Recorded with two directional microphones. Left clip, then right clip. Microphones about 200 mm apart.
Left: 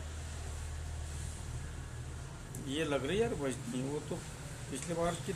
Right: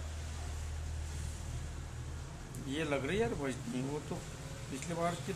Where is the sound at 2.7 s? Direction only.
20° right (ahead or behind).